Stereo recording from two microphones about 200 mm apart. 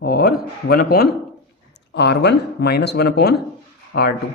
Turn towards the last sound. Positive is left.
turn(degrees=55)  # may be behind; listen again after turning